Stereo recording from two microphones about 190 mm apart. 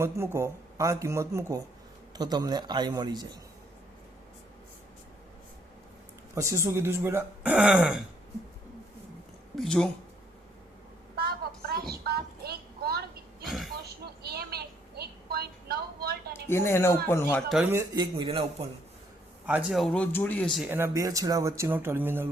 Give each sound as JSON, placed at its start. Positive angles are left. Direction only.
{"t": 0.0, "sound": "a man's voice", "side_deg": -15}
{"t": 6.3, "sound": "speech", "side_deg": -15}
{"t": 9.6, "sound": "speech", "side_deg": 5}
{"t": 11.2, "sound": "a sound", "side_deg": -55}
{"t": 13.4, "sound": "throat clearing", "side_deg": 0}
{"t": 13.8, "sound": "a sound", "side_deg": -55}
{"t": 16.3, "sound": "speech", "side_deg": 15}
{"t": 17.5, "sound": "speech", "side_deg": -10}
{"t": 17.9, "sound": "a man's voice", "side_deg": -25}
{"t": 19.5, "sound": "speech", "side_deg": -5}
{"t": 20.7, "sound": "speech", "side_deg": -10}